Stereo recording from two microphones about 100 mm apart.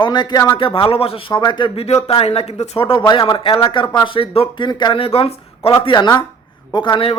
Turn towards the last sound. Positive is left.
turn(degrees=50)  # may be behind; listen again after turning